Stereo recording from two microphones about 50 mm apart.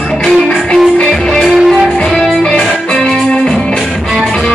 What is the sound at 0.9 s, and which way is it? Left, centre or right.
Music, centre.